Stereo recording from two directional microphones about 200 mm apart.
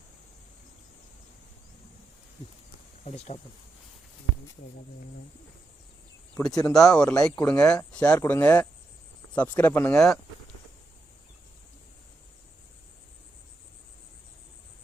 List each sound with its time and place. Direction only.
3.0 s speech: 30° left (ahead or behind)
6.3 s speech: 5° left (ahead or behind)